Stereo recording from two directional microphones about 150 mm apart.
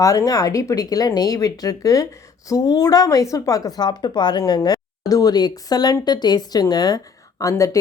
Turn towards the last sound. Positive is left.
turn(degrees=20)  # may be behind; listen again after turning